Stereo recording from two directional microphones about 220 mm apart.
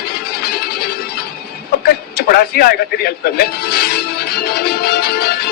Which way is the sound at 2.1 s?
45° left (ahead or behind).